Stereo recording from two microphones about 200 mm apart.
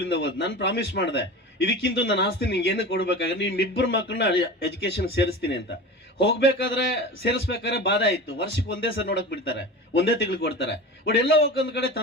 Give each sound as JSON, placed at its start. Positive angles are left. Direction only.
{"t": 0.1, "sound": "a man's voice", "side_deg": 55}